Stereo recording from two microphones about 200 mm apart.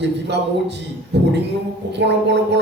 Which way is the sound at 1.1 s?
60° right (ahead or behind).